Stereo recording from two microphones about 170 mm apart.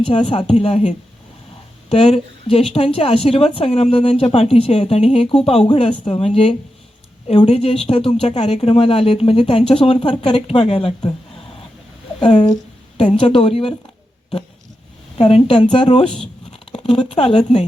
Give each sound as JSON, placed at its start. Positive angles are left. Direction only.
{"t": 0.0, "sound": "a woman's voice", "side_deg": 30}
{"t": 13.1, "sound": "a woman's voice", "side_deg": 35}
{"t": 15.2, "sound": "a woman's voice", "side_deg": 30}
{"t": 16.5, "sound": "a sound", "side_deg": 35}
{"t": 17.1, "sound": "a woman's voice", "side_deg": 35}